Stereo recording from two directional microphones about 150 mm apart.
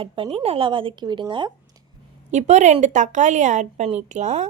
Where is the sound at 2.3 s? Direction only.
50° right (ahead or behind).